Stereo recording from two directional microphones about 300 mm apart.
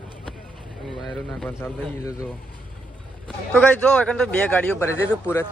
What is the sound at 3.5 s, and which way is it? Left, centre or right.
Speech, centre.